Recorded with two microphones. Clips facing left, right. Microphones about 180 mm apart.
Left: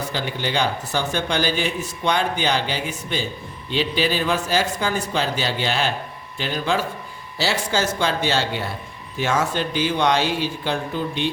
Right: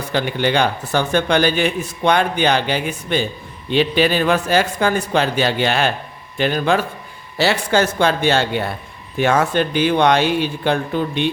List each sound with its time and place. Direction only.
0.1 s a man's voice: 60° right (ahead or behind)